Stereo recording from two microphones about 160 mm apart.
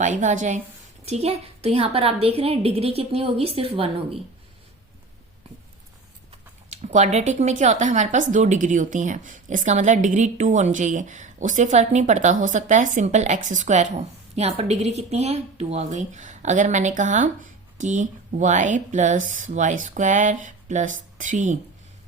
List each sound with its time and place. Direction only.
0.0 s a woman's voice: 50° right (ahead or behind)
6.7 s a woman's voice: 45° right (ahead or behind)